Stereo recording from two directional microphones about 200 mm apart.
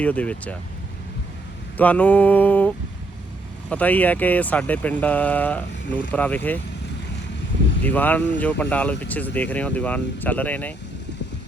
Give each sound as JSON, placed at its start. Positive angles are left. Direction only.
{"t": 0.0, "sound": "speech", "side_deg": 5}
{"t": 1.7, "sound": "speech", "side_deg": 5}
{"t": 7.9, "sound": "speech", "side_deg": 10}